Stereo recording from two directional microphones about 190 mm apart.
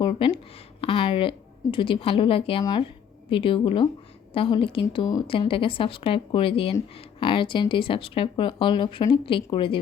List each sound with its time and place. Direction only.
0.0 s speech: 25° left (ahead or behind)